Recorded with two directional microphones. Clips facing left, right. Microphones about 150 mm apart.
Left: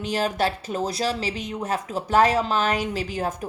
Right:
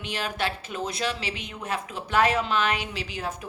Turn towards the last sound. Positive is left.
turn(degrees=45)  # may be behind; listen again after turning